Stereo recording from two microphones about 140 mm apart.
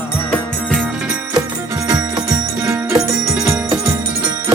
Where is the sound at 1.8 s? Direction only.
25° right (ahead or behind).